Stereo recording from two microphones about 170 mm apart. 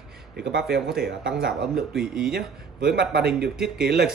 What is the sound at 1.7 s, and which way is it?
Speech, 5° right (ahead or behind).